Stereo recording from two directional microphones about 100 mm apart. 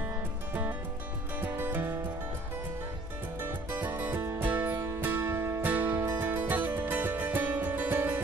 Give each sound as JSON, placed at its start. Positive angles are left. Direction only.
{"t": 0.5, "sound": "music", "side_deg": -15}
{"t": 3.3, "sound": "music", "side_deg": -20}